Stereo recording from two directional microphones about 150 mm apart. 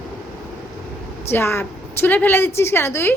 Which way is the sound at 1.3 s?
15° left (ahead or behind).